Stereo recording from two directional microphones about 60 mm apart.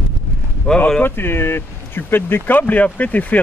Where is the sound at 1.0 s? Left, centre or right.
Left.